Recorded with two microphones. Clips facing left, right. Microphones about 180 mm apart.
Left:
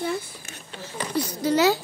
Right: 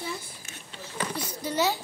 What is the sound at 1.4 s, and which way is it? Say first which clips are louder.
Speech: left 7 dB; 85° left.